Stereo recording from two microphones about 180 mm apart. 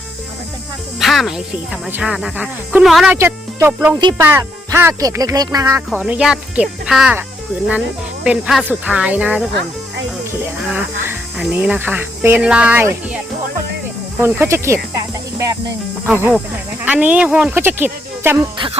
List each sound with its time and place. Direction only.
0.9 s speech: centre (ahead or behind)
3.2 s speech: 15° right (ahead or behind)
6.0 s speech: 5° right (ahead or behind)
10.6 s speech: 10° right (ahead or behind)
14.2 s speech: 15° right (ahead or behind)
18.5 s speech: 25° right (ahead or behind)